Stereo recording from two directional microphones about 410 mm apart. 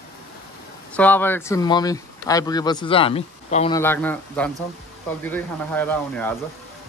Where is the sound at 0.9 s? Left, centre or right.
Centre.